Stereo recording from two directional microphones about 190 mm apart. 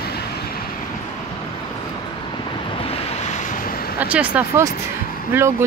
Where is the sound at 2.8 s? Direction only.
30° left (ahead or behind); by 3.9 s 50° left (ahead or behind).